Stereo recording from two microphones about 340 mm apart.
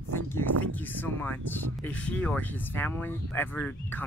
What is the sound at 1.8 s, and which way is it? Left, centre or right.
Speech, centre.